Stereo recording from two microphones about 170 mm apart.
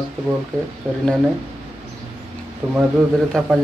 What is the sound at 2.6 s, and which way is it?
Speech, 5° right (ahead or behind).